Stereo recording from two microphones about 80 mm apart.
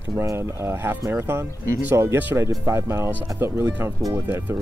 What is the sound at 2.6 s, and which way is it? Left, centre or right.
Speech, right.